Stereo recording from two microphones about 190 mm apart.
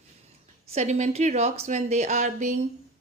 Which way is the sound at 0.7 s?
35° right (ahead or behind).